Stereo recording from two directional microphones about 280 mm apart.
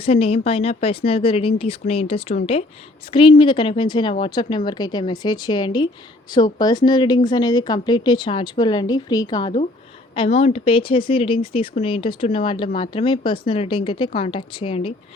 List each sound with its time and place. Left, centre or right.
0.0 s speech: left